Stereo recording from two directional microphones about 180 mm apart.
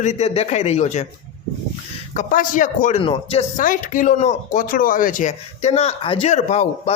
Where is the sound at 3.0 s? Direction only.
30° left (ahead or behind).